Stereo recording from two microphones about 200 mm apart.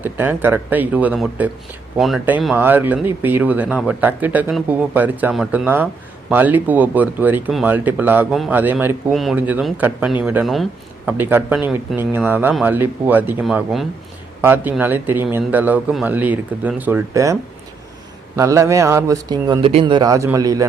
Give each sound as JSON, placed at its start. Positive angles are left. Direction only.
{"t": 0.0, "sound": "speech", "side_deg": -10}
{"t": 18.3, "sound": "speech", "side_deg": -15}